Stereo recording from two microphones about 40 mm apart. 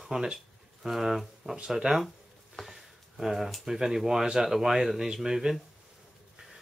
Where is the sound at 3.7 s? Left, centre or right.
Centre.